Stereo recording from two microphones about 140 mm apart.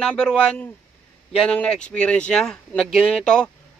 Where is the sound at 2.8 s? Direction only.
45° left (ahead or behind).